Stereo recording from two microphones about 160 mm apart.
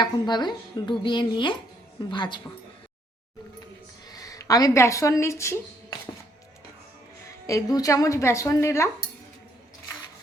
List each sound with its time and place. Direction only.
0.0 s speech: 25° left (ahead or behind)
4.1 s speech: 20° left (ahead or behind)
7.4 s speech: 20° left (ahead or behind)